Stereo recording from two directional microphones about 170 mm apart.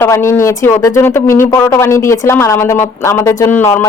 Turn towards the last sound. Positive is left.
turn(degrees=10)  # may be behind; listen again after turning